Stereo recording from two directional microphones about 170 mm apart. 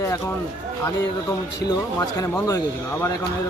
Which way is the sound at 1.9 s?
20° left (ahead or behind).